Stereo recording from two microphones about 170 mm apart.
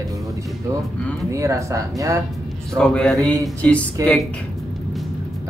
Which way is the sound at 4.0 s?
20° right (ahead or behind).